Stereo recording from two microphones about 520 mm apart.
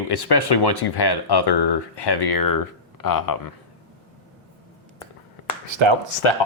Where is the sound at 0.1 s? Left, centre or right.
Left.